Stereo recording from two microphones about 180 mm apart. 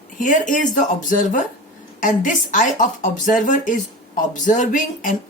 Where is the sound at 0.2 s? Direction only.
45° left (ahead or behind).